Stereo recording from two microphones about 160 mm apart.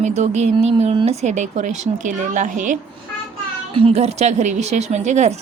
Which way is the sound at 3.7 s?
40° right (ahead or behind).